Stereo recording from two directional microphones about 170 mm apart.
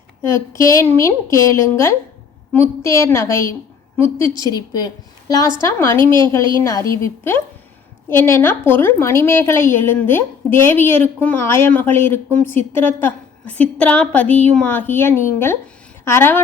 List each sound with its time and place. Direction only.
0.2 s a woman's voice: 15° left (ahead or behind)